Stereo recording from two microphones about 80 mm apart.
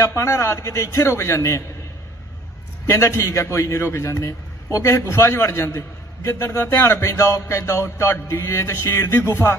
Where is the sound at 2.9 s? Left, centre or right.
Left.